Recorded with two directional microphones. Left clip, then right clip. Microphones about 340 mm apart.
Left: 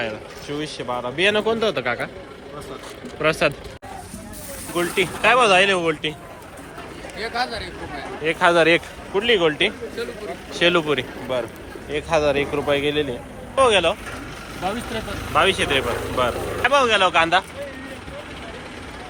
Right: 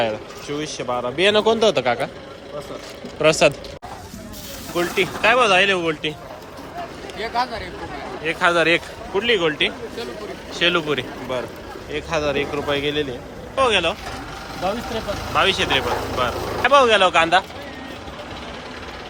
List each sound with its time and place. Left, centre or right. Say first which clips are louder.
0.0 s a man's voice: right 5 dB; centre
3.2 s a man's voice: right 4 dB; centre
4.7 s a man's voice: right 1 dB; centre
7.2 s a man's voice: right 2 dB; centre
15.4 s a man's voice: even; centre